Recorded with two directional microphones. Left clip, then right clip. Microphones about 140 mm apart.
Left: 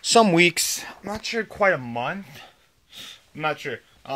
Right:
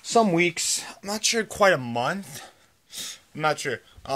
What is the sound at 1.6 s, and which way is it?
Speech, 35° right (ahead or behind).